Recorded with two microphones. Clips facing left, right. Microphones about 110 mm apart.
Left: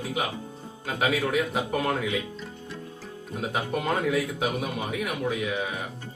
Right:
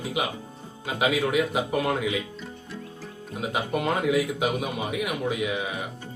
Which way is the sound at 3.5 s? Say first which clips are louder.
Right 1 dB; 5° right (ahead or behind).